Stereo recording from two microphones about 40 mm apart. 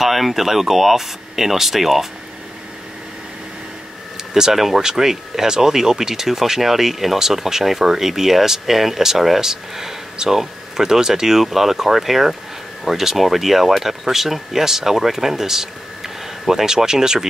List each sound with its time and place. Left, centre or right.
0.0 s speech: centre
4.3 s speech: centre